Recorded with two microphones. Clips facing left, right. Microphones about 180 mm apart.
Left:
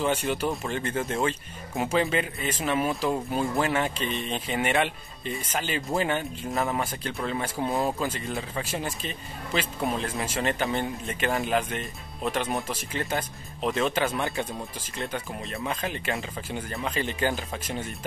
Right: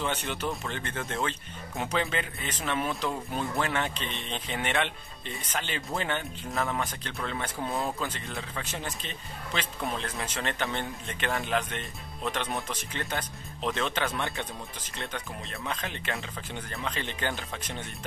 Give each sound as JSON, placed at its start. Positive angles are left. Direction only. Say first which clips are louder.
{"t": 0.0, "sound": "speech", "louder": "left 6 dB", "side_deg": 10}
{"t": 1.8, "sound": "speech", "louder": "left 5 dB", "side_deg": 10}
{"t": 6.5, "sound": "speech", "louder": "left 3 dB", "side_deg": 20}
{"t": 7.2, "sound": "speech", "louder": "left 4 dB", "side_deg": 5}